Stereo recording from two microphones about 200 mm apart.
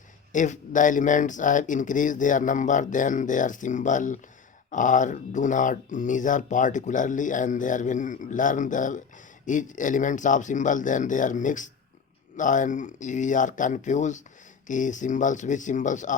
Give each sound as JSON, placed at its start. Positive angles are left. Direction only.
{"t": 0.3, "sound": "speech", "side_deg": 40}